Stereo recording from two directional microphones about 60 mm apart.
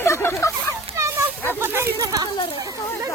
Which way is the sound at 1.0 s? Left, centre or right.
Right.